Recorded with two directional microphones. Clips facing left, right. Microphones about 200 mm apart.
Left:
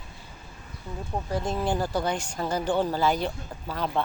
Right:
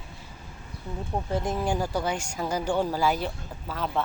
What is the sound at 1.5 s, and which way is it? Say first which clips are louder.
Speech: left 1 dB; 10° right (ahead or behind).